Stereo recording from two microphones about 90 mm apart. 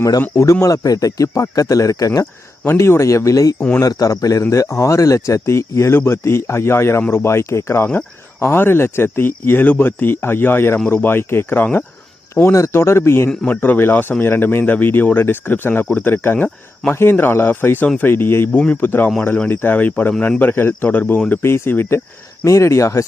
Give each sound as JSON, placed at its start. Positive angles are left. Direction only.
{"t": 0.2, "sound": "speech", "side_deg": 35}
{"t": 2.6, "sound": "speech", "side_deg": 30}
{"t": 12.3, "sound": "speech", "side_deg": 30}